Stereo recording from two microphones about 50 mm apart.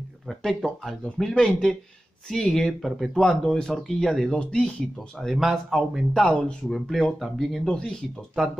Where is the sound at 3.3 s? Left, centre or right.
Centre.